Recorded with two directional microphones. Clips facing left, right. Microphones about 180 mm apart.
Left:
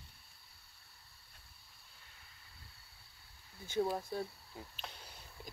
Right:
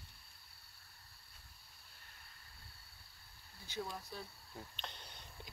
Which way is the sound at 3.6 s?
50° left (ahead or behind).